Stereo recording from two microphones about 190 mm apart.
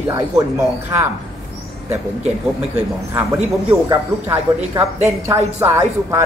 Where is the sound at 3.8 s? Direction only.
15° right (ahead or behind).